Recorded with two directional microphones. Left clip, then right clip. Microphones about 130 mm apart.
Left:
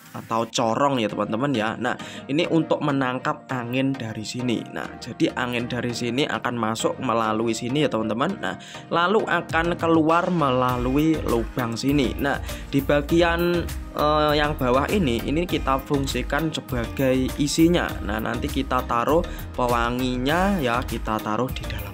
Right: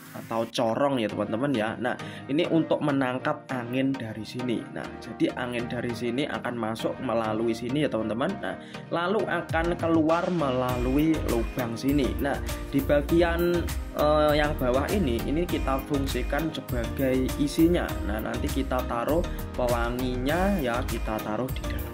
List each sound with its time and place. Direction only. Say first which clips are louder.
0.3 s speech: left 4 dB; 30° left (ahead or behind)
4.5 s speech: left 4 dB; 35° left (ahead or behind)